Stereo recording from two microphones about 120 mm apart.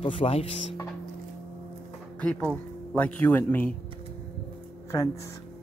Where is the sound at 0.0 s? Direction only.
50° left (ahead or behind).